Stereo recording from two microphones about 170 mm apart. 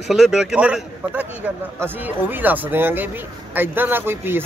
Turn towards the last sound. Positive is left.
turn(degrees=-10)  # may be behind; listen again after turning